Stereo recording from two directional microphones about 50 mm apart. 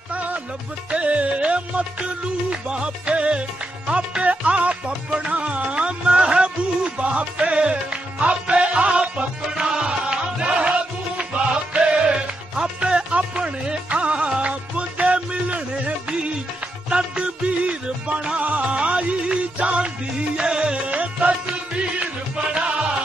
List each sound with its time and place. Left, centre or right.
0.9 s music: right
16.9 s music: right